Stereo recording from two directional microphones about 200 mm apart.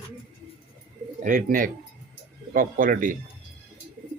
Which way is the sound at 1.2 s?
45° right (ahead or behind).